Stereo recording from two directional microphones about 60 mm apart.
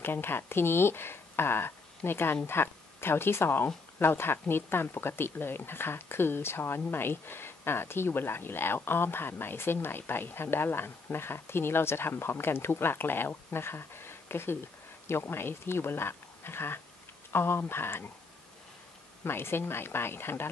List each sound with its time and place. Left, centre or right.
0.0 s speech: left
19.2 s speech: left